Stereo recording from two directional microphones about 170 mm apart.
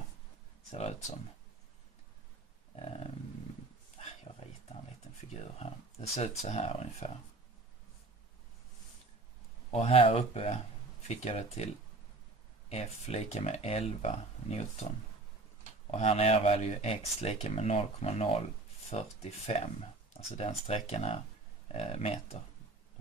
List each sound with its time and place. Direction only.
0.7 s speech: 40° left (ahead or behind)
4.0 s a sound: 40° left (ahead or behind)
5.3 s speech: 40° left (ahead or behind)
9.7 s speech: 35° left (ahead or behind)
15.9 s speech: 35° left (ahead or behind)